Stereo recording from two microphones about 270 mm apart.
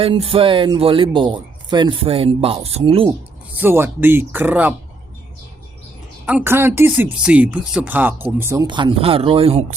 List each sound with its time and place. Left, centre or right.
0.0 s speech: right
3.5 s speech: centre
6.2 s speech: centre; by 9.7 s right